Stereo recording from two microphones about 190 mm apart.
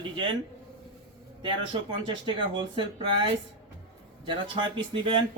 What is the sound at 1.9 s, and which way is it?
A man's voice, 25° right (ahead or behind).